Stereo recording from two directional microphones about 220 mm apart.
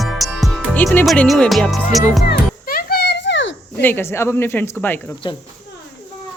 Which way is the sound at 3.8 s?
10° left (ahead or behind).